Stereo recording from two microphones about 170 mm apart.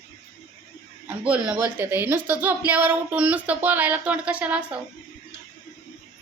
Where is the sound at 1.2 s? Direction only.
10° right (ahead or behind).